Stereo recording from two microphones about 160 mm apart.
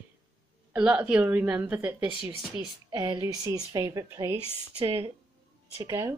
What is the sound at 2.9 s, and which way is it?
A woman's voice, 25° right (ahead or behind).